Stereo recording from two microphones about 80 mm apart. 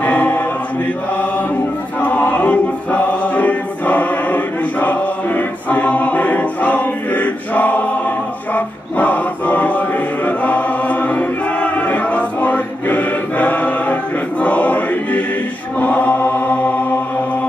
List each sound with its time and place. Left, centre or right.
0.0 s choir: left
2.0 s choir: centre
15.8 s chant: left